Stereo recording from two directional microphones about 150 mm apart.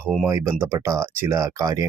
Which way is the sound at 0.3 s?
20° right (ahead or behind).